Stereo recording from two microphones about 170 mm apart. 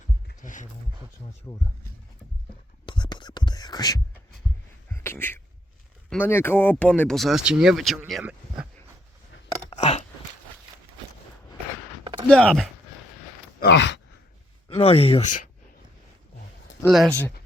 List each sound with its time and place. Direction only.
0.4 s speech: 50° left (ahead or behind)
1.5 s speech: 15° left (ahead or behind)
2.8 s whispering: 25° left (ahead or behind)
5.0 s speech: 10° left (ahead or behind); by 8.6 s 5° right (ahead or behind)
9.6 s a sound: 40° left (ahead or behind)
12.3 s speech: 5° left (ahead or behind)
13.6 s sigh: 90° left
14.7 s speech: 35° left (ahead or behind)
16.8 s speech: centre (ahead or behind)